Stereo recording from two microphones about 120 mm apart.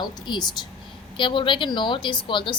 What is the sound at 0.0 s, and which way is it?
A woman's voice, 35° left (ahead or behind).